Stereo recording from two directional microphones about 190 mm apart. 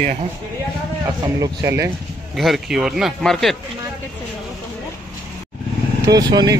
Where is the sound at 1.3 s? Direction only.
15° right (ahead or behind).